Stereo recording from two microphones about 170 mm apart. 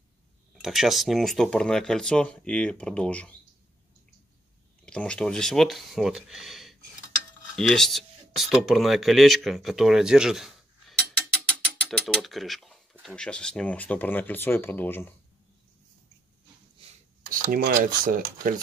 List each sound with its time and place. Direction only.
0.6 s speech: centre (ahead or behind)
4.8 s speech: 5° left (ahead or behind)
12.1 s speech: centre (ahead or behind)
17.3 s speech: 60° right (ahead or behind)